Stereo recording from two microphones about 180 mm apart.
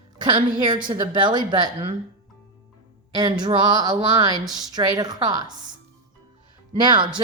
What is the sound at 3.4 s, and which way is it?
Speech, 25° right (ahead or behind).